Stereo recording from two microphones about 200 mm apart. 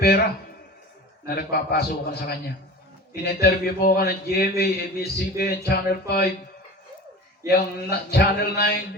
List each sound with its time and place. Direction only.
1.4 s a man's voice: 50° left (ahead or behind)
7.4 s a man's voice: 50° left (ahead or behind)